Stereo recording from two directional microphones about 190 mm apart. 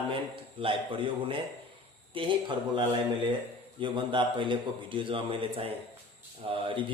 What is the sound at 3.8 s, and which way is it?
A man's voice, 25° right (ahead or behind).